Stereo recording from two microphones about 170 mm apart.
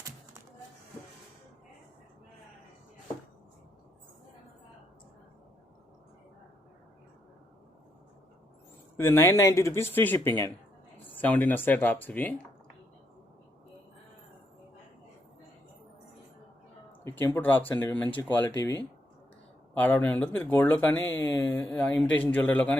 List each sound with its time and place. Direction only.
9.0 s speech: 15° left (ahead or behind)
17.0 s speech: 15° left (ahead or behind)